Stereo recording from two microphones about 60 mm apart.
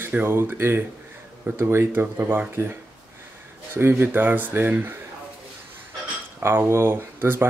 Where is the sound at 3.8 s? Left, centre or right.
Right.